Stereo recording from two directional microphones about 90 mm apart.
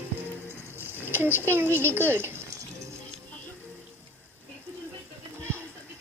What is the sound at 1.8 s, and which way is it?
Speech, 25° right (ahead or behind).